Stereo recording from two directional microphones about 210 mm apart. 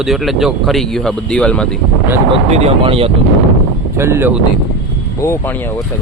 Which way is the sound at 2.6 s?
30° right (ahead or behind).